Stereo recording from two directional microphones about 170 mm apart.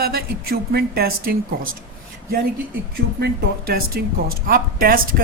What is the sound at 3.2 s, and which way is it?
A man's voice, 65° right (ahead or behind).